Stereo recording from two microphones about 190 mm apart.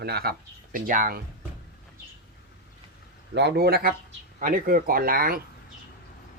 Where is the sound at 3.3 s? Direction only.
60° right (ahead or behind).